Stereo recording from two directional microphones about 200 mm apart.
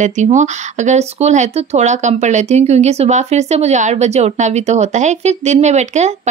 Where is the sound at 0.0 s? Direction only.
35° right (ahead or behind).